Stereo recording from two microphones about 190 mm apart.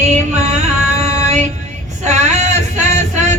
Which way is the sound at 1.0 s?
35° right (ahead or behind).